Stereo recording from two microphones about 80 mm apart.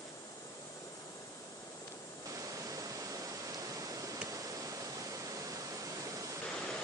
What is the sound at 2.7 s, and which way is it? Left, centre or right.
Waterfall, right.